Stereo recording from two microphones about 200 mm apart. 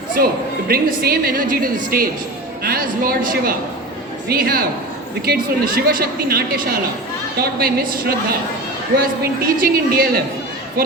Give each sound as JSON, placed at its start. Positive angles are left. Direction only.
{"t": 0.2, "sound": "speech", "side_deg": -50}